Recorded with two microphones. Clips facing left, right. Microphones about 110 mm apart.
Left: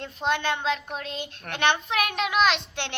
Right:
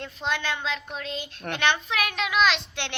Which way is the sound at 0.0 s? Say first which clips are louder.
Left 3 dB; 50° left (ahead or behind).